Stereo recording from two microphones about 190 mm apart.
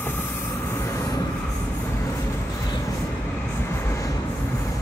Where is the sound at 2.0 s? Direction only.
20° left (ahead or behind).